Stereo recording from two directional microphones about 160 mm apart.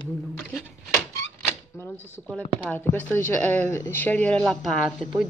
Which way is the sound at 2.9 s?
10° left (ahead or behind).